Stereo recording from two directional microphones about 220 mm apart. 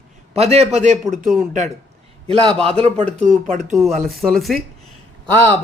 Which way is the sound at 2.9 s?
5° left (ahead or behind).